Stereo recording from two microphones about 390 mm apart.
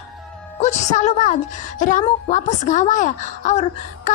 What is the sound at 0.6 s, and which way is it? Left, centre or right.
A woman's voice, centre.